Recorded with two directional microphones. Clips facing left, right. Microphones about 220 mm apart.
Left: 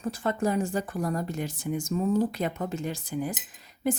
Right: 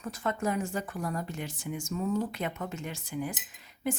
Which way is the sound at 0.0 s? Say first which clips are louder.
Left 4 dB; 30° left (ahead or behind).